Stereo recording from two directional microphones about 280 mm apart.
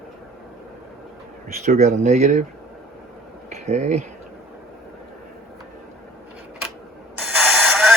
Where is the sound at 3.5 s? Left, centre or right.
Right.